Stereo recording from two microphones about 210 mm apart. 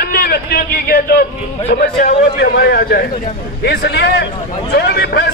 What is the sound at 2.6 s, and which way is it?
A man's voice, 50° left (ahead or behind).